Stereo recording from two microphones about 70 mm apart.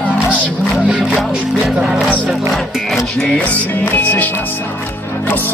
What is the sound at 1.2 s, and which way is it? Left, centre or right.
Music, centre.